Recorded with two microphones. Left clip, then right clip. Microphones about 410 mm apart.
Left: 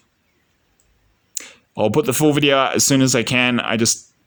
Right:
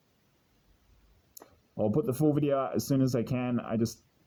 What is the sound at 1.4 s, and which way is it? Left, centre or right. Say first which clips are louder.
Speech: left 12 dB; right.